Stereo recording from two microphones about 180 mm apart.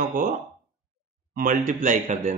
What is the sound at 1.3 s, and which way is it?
Speech, 45° right (ahead or behind).